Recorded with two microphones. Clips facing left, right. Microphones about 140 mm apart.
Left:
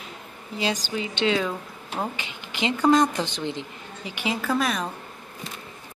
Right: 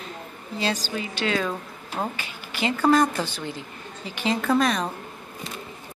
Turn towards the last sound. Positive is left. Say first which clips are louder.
# right 3 dB
turn(degrees=5)  # may be behind; listen again after turning